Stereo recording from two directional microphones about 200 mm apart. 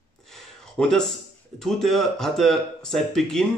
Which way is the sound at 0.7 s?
5° left (ahead or behind).